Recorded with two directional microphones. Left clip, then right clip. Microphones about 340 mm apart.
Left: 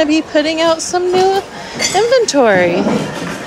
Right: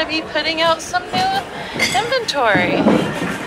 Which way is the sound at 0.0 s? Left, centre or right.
Left.